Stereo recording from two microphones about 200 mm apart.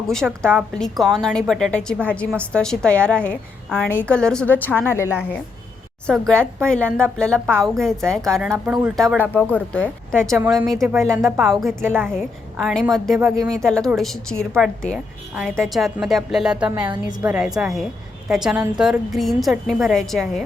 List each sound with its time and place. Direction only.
0.2 s a woman's voice: 5° right (ahead or behind)
10.3 s a woman's voice: 10° right (ahead or behind)
12.0 s a woman's voice: centre (ahead or behind)